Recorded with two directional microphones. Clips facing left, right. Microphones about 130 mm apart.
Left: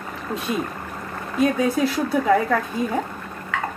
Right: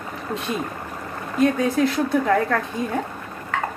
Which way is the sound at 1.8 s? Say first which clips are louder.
Right 1 dB; 5° left (ahead or behind).